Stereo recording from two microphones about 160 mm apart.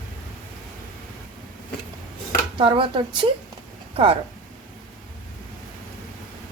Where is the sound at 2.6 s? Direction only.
35° right (ahead or behind).